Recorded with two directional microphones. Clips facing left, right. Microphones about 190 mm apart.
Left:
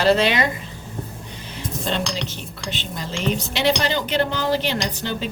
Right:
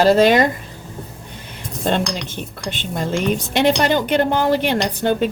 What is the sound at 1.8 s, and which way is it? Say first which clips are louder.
Speech: right 6 dB; 55° right (ahead or behind).